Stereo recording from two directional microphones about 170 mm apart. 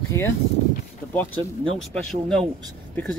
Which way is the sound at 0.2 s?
15° left (ahead or behind).